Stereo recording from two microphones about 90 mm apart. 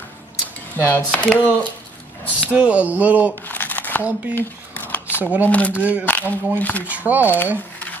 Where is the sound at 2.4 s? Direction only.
15° right (ahead or behind).